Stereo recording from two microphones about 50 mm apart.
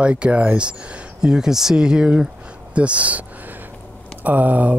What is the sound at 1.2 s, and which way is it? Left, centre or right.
Speech, centre.